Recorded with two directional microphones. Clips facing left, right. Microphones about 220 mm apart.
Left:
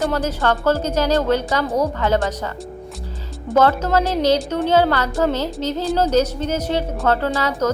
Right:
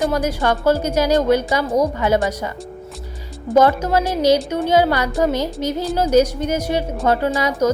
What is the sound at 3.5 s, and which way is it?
A woman's voice, 10° right (ahead or behind).